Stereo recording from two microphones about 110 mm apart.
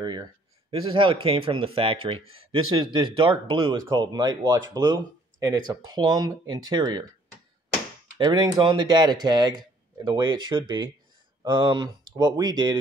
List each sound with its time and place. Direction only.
0.0 s speech: 40° right (ahead or behind)
8.2 s speech: 40° right (ahead or behind)